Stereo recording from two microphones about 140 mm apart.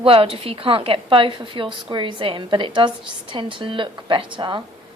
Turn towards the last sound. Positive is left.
turn(degrees=-35)  # may be behind; listen again after turning